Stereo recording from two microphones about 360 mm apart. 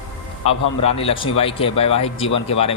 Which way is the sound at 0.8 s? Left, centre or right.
Centre.